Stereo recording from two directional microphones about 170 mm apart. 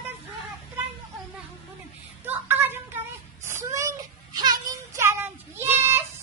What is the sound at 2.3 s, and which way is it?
Child singing, 10° right (ahead or behind).